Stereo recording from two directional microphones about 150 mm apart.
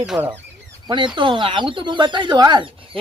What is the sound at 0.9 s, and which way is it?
Speech, 30° right (ahead or behind).